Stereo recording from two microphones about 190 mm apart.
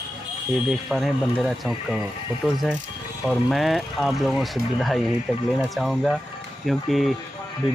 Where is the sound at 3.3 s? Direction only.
Centre (ahead or behind).